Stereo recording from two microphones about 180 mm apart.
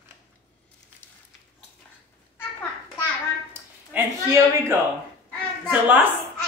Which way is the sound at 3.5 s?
15° right (ahead or behind).